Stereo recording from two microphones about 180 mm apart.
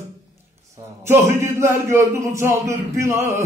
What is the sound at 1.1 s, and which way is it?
A man's voice, 15° right (ahead or behind).